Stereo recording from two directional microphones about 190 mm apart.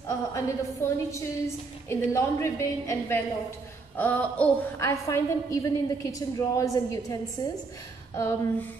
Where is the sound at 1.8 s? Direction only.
15° left (ahead or behind).